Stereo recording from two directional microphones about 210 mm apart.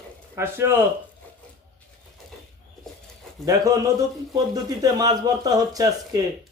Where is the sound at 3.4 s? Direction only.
15° right (ahead or behind).